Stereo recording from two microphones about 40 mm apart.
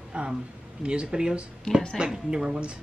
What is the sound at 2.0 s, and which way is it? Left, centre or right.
Speech, centre.